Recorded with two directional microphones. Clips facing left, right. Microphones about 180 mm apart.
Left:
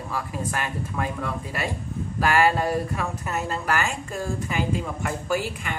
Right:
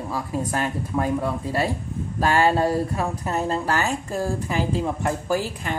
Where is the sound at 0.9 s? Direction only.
30° right (ahead or behind).